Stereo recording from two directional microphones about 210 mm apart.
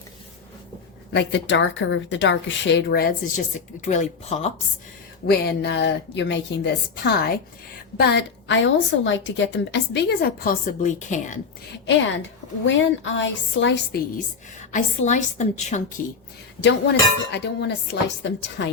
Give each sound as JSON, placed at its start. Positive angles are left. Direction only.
{"t": 1.1, "sound": "speech", "side_deg": 55}
{"t": 5.2, "sound": "a woman's voice", "side_deg": 50}
{"t": 11.9, "sound": "speech", "side_deg": 60}
{"t": 13.1, "sound": "speech", "side_deg": 60}
{"t": 14.6, "sound": "a woman's voice", "side_deg": 35}
{"t": 16.6, "sound": "speech", "side_deg": 55}